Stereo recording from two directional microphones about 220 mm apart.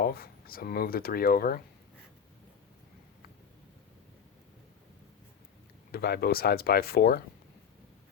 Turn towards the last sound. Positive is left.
turn(degrees=45)  # may be behind; listen again after turning